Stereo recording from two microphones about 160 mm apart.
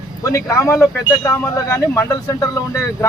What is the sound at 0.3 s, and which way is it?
Speech, 20° left (ahead or behind).